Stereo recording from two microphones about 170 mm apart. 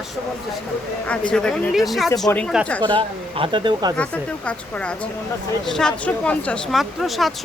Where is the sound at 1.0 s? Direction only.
5° left (ahead or behind).